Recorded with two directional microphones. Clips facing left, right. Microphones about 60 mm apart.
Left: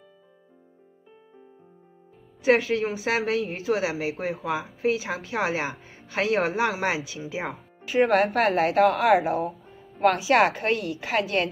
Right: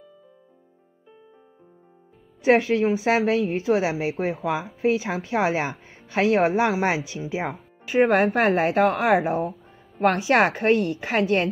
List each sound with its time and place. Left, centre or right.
2.4 s a woman's voice: right
9.9 s a woman's voice: centre